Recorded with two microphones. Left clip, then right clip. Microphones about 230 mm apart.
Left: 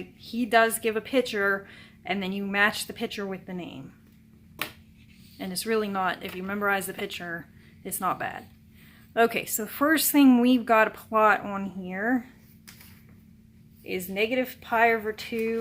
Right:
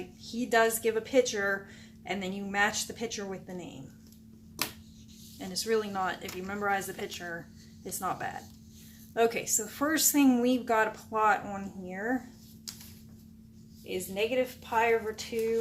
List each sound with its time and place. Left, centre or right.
0.2 s a woman's voice: left
5.4 s a woman's voice: left
13.8 s a woman's voice: left